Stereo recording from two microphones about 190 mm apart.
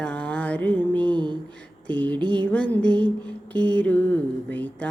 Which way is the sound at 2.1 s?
25° right (ahead or behind).